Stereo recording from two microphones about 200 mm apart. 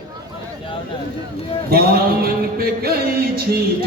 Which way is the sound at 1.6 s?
50° right (ahead or behind).